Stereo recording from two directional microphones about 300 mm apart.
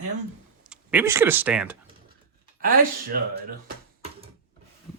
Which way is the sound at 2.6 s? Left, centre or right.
Right.